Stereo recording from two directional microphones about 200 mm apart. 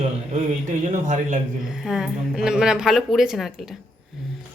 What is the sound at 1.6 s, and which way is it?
Speech, centre (ahead or behind).